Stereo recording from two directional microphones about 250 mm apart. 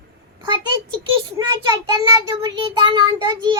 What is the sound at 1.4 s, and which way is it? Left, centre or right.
Child singing, centre.